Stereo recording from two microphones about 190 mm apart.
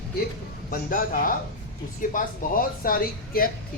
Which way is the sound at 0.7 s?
45° left (ahead or behind).